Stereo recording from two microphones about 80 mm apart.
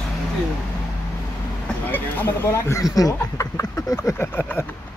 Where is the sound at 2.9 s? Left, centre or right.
Left.